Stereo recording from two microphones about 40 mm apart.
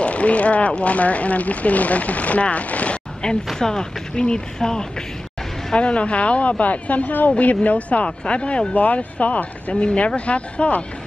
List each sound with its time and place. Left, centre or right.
0.0 s speech: left
3.2 s speech: centre
5.8 s speech: left
8.7 s speech: left